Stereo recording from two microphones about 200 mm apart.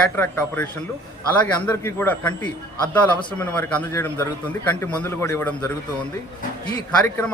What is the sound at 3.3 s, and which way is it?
A man's voice, 5° left (ahead or behind).